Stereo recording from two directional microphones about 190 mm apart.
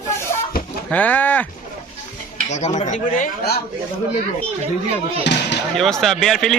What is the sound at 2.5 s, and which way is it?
Speech, 40° left (ahead or behind).